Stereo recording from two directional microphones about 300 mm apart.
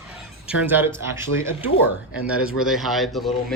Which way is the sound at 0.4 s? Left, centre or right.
Centre.